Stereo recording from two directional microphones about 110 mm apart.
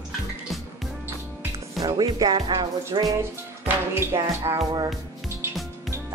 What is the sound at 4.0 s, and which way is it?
Speech, 25° right (ahead or behind).